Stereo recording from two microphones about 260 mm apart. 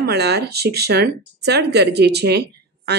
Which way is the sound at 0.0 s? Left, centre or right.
Right.